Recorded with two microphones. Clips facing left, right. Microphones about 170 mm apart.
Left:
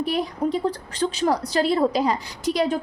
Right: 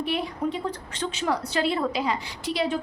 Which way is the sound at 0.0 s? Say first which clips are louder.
Left 3 dB; 40° left (ahead or behind).